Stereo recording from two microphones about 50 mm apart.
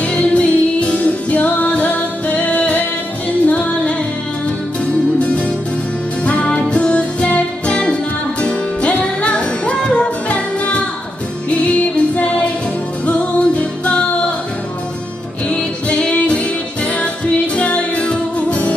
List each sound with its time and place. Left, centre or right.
0.0 s music: left
6.2 s music: left
15.9 s music: left